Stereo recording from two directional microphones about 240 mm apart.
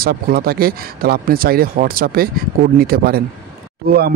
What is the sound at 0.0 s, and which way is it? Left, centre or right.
Speech, right.